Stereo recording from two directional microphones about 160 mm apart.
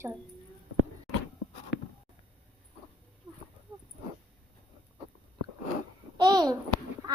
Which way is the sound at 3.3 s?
25° right (ahead or behind).